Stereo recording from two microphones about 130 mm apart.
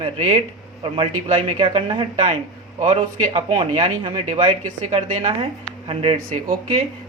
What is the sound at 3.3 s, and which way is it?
Speech, 45° right (ahead or behind).